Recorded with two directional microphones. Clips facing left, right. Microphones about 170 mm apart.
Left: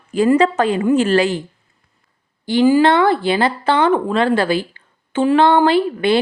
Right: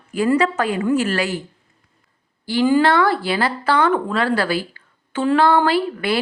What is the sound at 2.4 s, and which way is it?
Speech, 20° left (ahead or behind).